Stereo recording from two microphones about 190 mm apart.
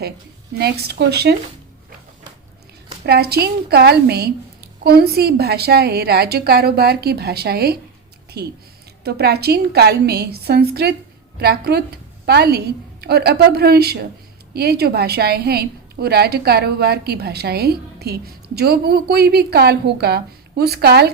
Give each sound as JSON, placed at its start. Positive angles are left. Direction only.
{"t": 0.6, "sound": "a woman's voice", "side_deg": -55}
{"t": 3.1, "sound": "a woman's voice", "side_deg": -55}